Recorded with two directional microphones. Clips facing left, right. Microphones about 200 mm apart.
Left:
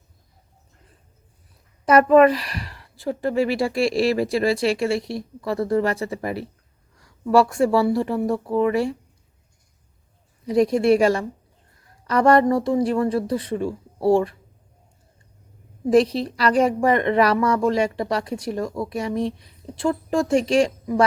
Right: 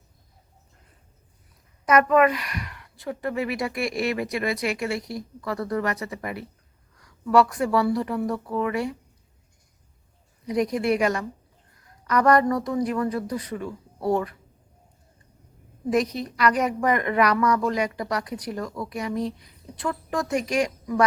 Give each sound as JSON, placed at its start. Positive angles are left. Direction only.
{"t": 1.9, "sound": "a woman's voice", "side_deg": 30}
{"t": 10.4, "sound": "a woman's voice", "side_deg": 25}
{"t": 15.9, "sound": "a woman's voice", "side_deg": 30}